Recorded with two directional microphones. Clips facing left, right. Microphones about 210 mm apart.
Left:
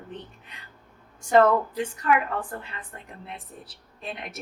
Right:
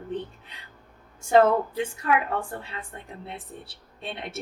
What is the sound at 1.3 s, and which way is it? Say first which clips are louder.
Speech: even; 25° right (ahead or behind).